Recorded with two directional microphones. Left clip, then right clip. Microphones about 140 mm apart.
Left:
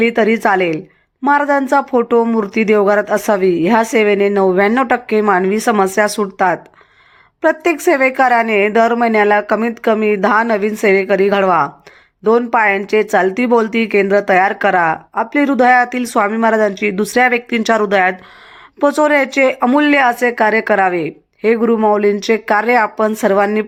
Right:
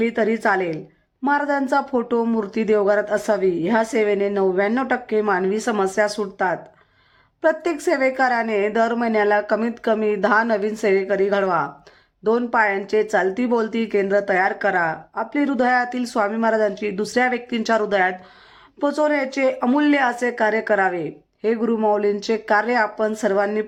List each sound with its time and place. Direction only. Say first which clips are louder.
0.0 s speech: left 7 dB; 25° left (ahead or behind)
7.4 s speech: left 6 dB; 25° left (ahead or behind)